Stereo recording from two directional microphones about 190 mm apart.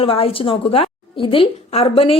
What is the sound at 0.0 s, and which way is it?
A woman's voice, 30° left (ahead or behind).